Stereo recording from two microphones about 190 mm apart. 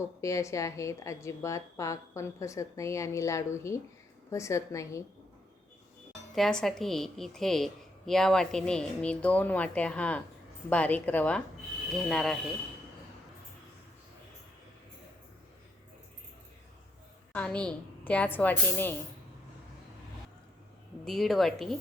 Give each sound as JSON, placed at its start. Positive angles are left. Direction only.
{"t": 0.2, "sound": "a woman's voice", "side_deg": 15}
{"t": 6.3, "sound": "a woman's voice", "side_deg": 0}
{"t": 17.3, "sound": "a woman's voice", "side_deg": 5}
{"t": 21.0, "sound": "a woman's voice", "side_deg": 0}